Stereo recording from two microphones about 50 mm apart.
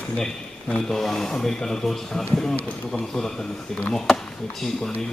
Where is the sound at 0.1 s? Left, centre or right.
Left.